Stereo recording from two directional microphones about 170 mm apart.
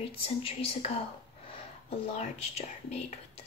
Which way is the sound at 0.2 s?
35° left (ahead or behind).